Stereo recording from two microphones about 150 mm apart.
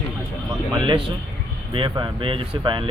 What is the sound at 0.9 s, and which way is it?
Speech, 35° right (ahead or behind).